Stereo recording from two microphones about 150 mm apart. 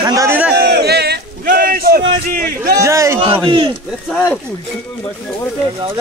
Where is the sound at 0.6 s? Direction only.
90° right.